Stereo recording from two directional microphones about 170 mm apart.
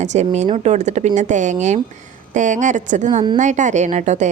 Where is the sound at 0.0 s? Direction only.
40° right (ahead or behind).